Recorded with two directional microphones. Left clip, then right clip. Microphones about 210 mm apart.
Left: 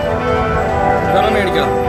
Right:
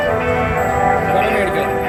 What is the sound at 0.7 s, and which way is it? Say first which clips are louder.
Music: left 1 dB; 15° right (ahead or behind).